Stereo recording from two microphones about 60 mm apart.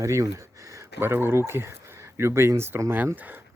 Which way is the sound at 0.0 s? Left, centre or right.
Right.